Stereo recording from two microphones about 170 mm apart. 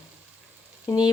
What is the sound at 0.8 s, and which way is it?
Frying, 25° left (ahead or behind).